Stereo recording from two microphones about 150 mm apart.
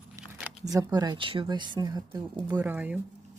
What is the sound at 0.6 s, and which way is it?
Speech, 25° right (ahead or behind).